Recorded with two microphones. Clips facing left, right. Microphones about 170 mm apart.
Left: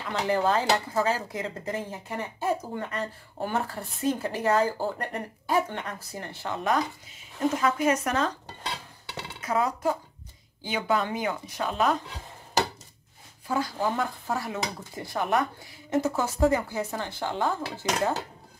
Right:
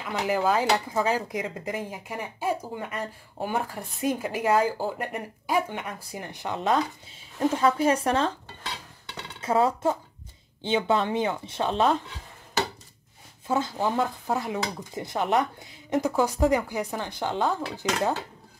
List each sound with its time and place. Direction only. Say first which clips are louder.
0.1 s speech: even; 10° right (ahead or behind); by 8.3 s 30° right (ahead or behind)
9.4 s speech: right 4 dB; 30° right (ahead or behind)
13.5 s speech: right 2 dB; 20° right (ahead or behind)